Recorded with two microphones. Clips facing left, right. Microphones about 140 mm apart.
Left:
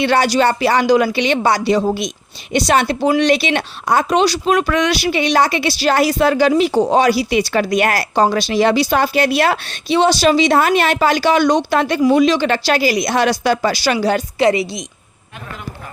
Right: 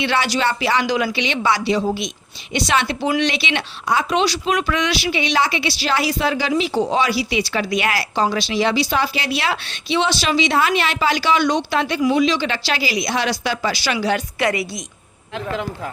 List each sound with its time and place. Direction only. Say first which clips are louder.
0.0 s speech: left 6 dB; 45° left (ahead or behind)
14.3 s a woman's voice: left 6 dB; 25° left (ahead or behind)